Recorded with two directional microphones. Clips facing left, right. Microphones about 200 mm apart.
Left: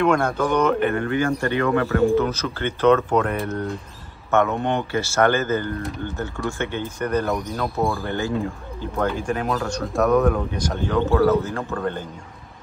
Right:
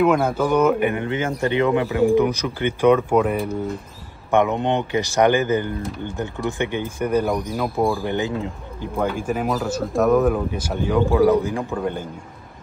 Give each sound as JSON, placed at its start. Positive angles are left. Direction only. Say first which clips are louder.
{"t": 0.0, "sound": "speech", "louder": "right 2 dB", "side_deg": -5}
{"t": 4.3, "sound": "speech", "louder": "right 2 dB", "side_deg": -15}
{"t": 8.0, "sound": "speech", "louder": "right 1 dB", "side_deg": -15}